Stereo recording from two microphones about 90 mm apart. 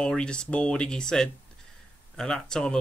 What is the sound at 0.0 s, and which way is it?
Speech, 10° left (ahead or behind).